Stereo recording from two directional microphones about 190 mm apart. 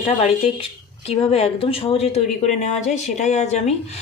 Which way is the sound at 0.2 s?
30° left (ahead or behind).